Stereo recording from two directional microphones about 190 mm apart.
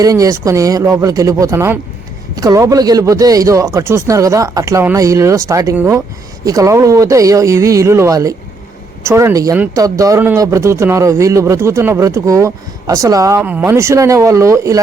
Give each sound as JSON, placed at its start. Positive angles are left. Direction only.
{"t": 0.0, "sound": "speech", "side_deg": -15}